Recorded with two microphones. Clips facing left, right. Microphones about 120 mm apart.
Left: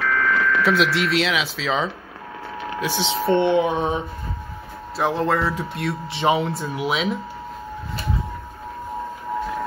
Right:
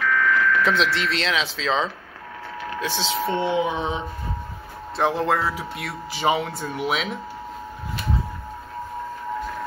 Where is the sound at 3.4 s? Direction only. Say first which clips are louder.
Left 4 dB; 55° left (ahead or behind).